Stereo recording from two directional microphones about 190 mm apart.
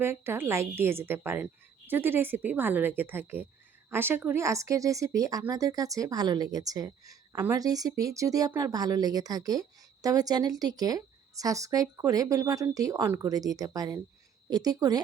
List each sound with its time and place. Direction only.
0.0 s a woman's voice: 10° right (ahead or behind)